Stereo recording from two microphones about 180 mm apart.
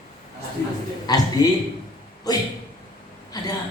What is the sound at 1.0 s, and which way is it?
Speech, 20° left (ahead or behind).